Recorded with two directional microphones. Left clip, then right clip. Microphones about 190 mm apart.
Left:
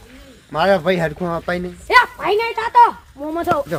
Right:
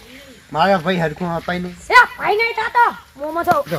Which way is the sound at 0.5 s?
20° left (ahead or behind).